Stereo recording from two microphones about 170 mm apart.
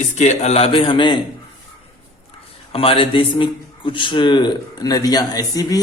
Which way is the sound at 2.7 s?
35° left (ahead or behind).